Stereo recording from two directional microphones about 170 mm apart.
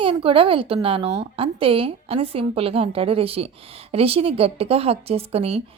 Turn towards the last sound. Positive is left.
turn(degrees=-40)  # may be behind; listen again after turning